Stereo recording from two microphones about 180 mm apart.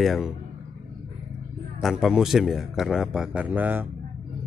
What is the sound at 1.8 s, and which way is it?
Speech, centre (ahead or behind).